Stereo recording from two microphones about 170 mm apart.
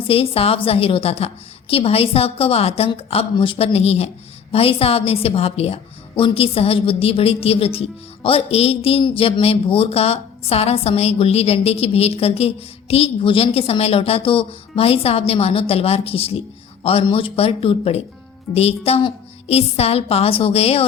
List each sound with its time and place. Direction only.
0.0 s a woman's voice: 35° left (ahead or behind)